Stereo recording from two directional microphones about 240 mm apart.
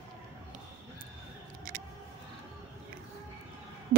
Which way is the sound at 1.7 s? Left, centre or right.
Right.